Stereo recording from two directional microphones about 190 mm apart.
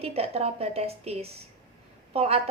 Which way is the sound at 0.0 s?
30° right (ahead or behind).